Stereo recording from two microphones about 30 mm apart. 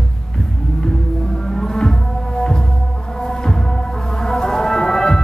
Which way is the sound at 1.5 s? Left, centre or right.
Centre.